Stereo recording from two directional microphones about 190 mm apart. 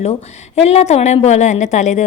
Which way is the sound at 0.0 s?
35° left (ahead or behind).